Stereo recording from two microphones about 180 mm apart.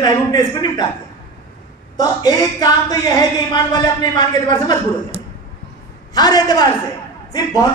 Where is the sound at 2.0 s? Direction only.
20° left (ahead or behind).